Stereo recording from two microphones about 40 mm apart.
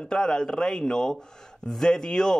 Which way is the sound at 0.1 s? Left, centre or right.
Centre.